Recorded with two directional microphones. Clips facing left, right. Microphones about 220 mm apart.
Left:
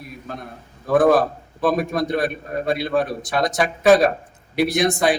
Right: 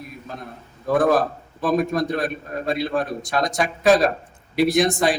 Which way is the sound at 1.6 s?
Centre (ahead or behind).